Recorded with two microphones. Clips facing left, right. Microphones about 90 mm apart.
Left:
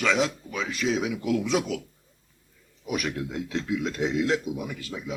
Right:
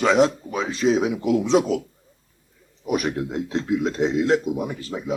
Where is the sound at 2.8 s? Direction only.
40° right (ahead or behind).